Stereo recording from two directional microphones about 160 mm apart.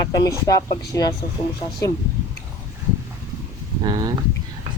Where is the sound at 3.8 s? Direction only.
25° right (ahead or behind).